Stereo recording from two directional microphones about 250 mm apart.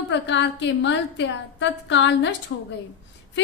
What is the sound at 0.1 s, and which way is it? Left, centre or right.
A woman's voice, left.